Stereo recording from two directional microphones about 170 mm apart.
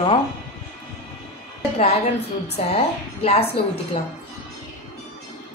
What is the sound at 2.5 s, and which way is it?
A woman's voice, 35° left (ahead or behind).